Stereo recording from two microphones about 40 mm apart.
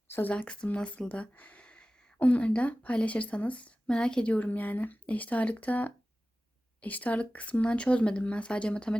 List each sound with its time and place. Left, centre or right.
0.1 s speech: left
0.4 s speech: left
1.6 s a sound: left
2.1 s a woman's voice: left
3.8 s speech: left
4.3 s speech: left